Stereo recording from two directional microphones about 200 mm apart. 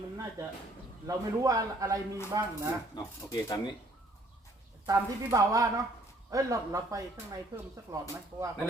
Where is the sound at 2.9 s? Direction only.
20° left (ahead or behind).